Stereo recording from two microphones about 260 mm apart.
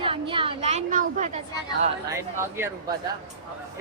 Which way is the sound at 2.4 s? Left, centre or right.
Centre.